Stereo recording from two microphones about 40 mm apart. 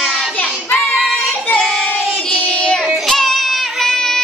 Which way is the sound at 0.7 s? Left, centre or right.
Centre.